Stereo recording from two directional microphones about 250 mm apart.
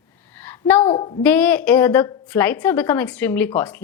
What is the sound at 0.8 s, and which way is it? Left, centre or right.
Speech, centre.